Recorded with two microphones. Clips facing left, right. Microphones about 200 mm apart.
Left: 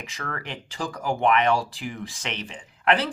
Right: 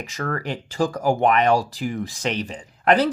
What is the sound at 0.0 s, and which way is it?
Speech, 40° right (ahead or behind).